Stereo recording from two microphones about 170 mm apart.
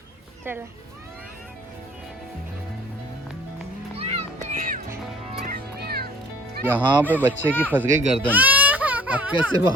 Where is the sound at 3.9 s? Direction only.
35° right (ahead or behind).